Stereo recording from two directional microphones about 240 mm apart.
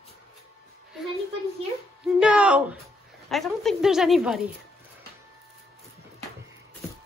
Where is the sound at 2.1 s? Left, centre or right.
Centre.